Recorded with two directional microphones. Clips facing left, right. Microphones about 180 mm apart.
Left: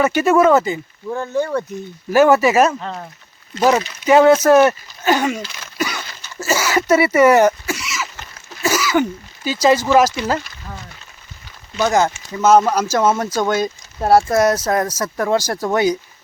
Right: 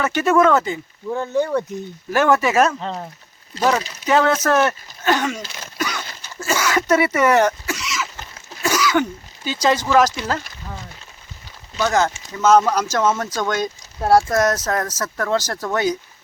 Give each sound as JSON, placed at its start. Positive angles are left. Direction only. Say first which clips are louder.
{"t": 0.0, "sound": "speech", "louder": "left 3 dB", "side_deg": 10}
{"t": 1.0, "sound": "speech", "louder": "even", "side_deg": -15}
{"t": 2.1, "sound": "speech", "louder": "left 4 dB", "side_deg": 10}
{"t": 2.8, "sound": "speech", "louder": "right 1 dB", "side_deg": -20}
{"t": 3.6, "sound": "speech", "louder": "left 4 dB", "side_deg": 10}
{"t": 5.7, "sound": "a sound", "louder": "left 2 dB", "side_deg": 10}
{"t": 8.6, "sound": "throat clearing", "louder": "left 2 dB", "side_deg": 5}
{"t": 9.9, "sound": "speech", "louder": "left 2 dB", "side_deg": 5}
{"t": 11.8, "sound": "speech", "louder": "left 3 dB", "side_deg": 10}